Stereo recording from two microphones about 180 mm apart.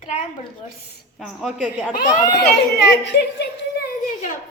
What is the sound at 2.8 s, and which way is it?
A woman's voice, 75° left (ahead or behind).